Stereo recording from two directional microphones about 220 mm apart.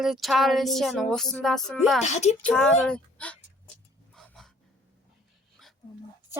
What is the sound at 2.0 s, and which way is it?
Speech, 30° left (ahead or behind).